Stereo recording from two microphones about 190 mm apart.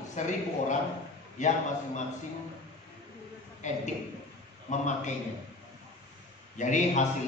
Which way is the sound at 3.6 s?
40° left (ahead or behind).